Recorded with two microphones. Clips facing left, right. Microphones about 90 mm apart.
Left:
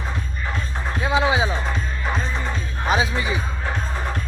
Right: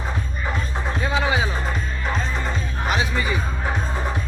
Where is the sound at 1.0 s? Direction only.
15° left (ahead or behind).